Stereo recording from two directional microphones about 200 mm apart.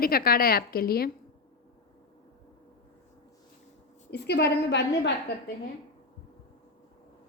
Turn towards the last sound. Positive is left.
turn(degrees=55)  # may be behind; listen again after turning